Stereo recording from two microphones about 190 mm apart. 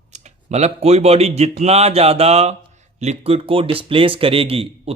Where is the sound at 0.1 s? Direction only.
40° right (ahead or behind).